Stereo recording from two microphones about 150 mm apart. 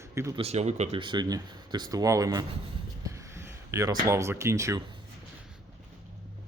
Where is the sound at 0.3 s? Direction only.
45° right (ahead or behind).